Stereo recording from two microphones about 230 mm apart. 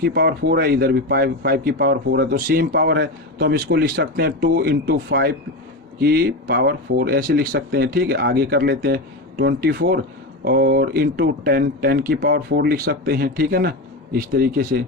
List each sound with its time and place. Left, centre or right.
0.0 s speech: right